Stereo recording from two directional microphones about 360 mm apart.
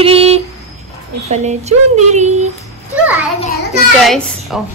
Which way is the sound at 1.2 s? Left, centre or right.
Centre.